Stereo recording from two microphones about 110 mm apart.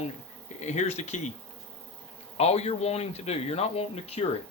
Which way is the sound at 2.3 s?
75° left (ahead or behind).